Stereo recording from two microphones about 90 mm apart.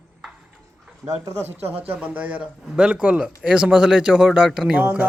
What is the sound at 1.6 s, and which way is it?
Speech, 90° right.